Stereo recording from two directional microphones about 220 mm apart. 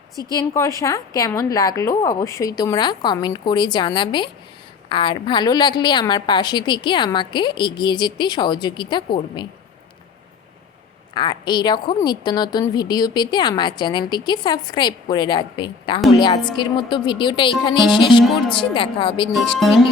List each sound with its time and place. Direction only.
0.3 s a woman's voice: 15° left (ahead or behind)
11.1 s a woman's voice: 20° left (ahead or behind)
19.5 s speech: centre (ahead or behind)